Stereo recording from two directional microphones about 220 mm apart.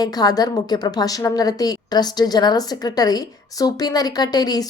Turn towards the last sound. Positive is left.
turn(degrees=15)  # may be behind; listen again after turning